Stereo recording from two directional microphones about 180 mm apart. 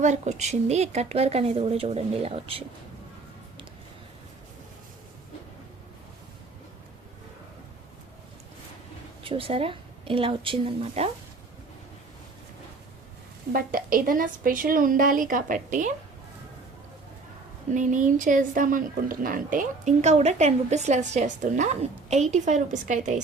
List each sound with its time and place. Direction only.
0.0 s speech: 40° right (ahead or behind)
9.2 s a woman's voice: 30° right (ahead or behind)
13.5 s speech: 50° right (ahead or behind)
17.7 s speech: 45° right (ahead or behind)